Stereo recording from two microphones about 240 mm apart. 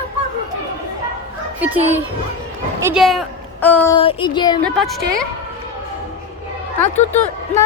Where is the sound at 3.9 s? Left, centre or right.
Left.